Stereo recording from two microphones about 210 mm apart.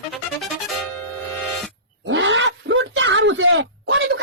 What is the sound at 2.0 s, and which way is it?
Speech, 60° right (ahead or behind).